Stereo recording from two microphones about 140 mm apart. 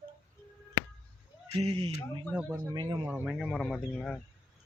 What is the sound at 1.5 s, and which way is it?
Speech, 45° right (ahead or behind).